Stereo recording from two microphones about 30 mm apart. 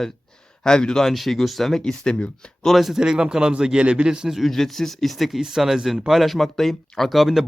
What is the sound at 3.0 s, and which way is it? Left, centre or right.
Speech, right.